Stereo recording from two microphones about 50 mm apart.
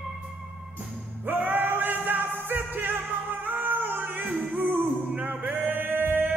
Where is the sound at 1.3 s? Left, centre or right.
Right.